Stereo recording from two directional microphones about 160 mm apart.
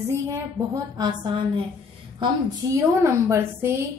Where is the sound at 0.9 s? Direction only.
25° right (ahead or behind).